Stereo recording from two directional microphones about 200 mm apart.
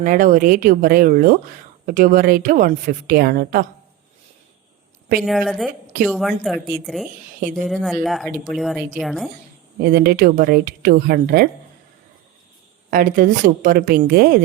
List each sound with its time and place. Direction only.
0.0 s a woman's voice: 45° right (ahead or behind)
5.2 s a woman's voice: centre (ahead or behind)
9.8 s a woman's voice: 50° right (ahead or behind)
12.9 s a woman's voice: 45° right (ahead or behind)